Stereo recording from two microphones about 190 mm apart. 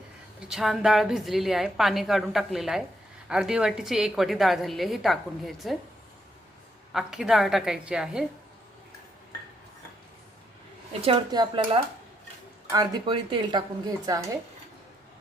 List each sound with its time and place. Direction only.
0.3 s a woman's voice: 5° right (ahead or behind)
6.9 s a woman's voice: centre (ahead or behind)
11.0 s speech: 25° right (ahead or behind)